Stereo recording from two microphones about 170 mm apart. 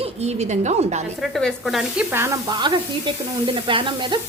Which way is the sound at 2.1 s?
15° right (ahead or behind).